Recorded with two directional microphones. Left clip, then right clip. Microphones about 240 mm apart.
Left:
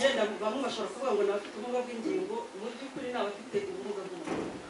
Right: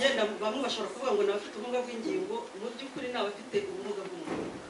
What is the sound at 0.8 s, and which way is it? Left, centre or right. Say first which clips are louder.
Speech: even; centre.